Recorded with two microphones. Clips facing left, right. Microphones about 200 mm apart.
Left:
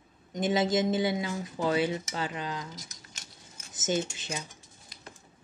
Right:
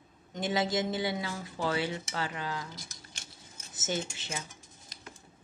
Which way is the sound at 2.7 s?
30° right (ahead or behind).